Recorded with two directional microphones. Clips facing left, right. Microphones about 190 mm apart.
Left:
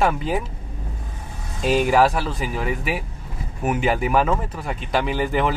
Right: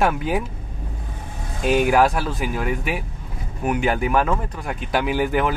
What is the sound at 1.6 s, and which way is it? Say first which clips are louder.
Speech: even; 5° right (ahead or behind).